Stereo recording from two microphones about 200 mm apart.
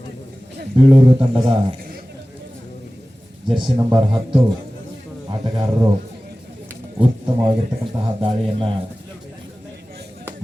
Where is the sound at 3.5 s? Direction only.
25° right (ahead or behind).